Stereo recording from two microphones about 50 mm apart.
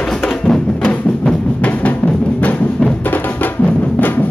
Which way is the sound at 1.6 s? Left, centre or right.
Left.